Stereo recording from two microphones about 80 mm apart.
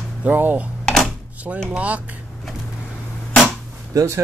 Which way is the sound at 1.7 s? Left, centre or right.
Centre.